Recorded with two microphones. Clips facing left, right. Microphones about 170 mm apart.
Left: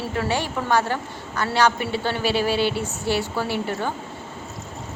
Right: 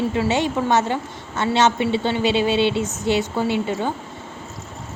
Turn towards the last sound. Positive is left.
turn(degrees=-20)  # may be behind; listen again after turning